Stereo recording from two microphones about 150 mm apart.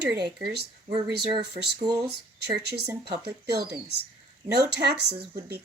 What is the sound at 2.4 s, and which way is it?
Speech, 90° right.